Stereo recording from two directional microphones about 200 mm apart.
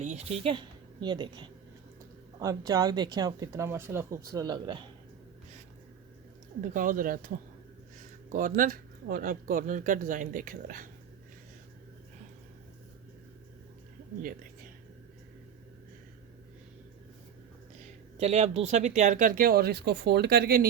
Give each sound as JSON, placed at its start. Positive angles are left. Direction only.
{"t": 0.0, "sound": "a woman's voice", "side_deg": -35}
{"t": 6.6, "sound": "speech", "side_deg": -40}
{"t": 8.3, "sound": "speech", "side_deg": -40}
{"t": 18.2, "sound": "speech", "side_deg": -30}